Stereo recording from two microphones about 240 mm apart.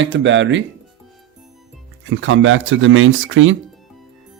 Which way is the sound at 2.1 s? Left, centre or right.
Right.